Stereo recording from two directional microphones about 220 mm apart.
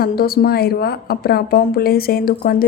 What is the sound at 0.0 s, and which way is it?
A woman's voice, 45° left (ahead or behind).